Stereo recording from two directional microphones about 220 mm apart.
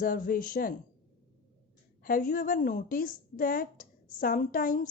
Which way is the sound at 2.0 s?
40° left (ahead or behind).